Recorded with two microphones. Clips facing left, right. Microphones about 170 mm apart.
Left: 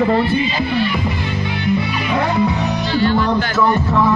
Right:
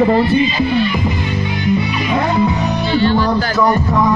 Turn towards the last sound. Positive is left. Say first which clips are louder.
# right 2 dB
turn(degrees=-30)  # may be behind; listen again after turning